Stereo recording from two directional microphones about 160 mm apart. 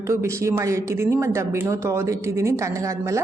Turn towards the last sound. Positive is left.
turn(degrees=-20)  # may be behind; listen again after turning